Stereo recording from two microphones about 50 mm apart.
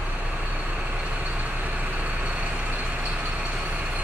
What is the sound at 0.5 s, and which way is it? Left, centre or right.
Vehicle, right.